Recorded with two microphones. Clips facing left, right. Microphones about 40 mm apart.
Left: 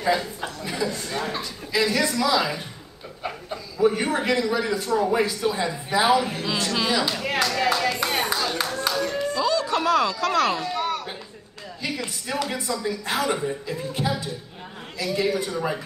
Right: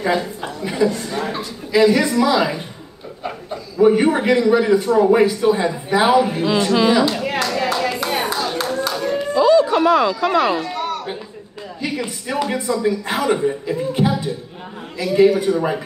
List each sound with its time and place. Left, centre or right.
0.0 s a man's voice: right
3.7 s a man's voice: right
7.4 s clapping: centre
8.6 s a sound: centre
11.8 s a man's voice: centre